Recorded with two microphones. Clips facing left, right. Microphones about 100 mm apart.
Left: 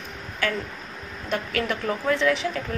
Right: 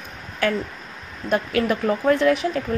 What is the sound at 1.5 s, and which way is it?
Speech, 40° right (ahead or behind).